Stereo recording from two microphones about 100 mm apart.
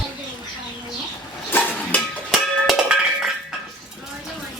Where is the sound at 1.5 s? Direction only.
20° left (ahead or behind).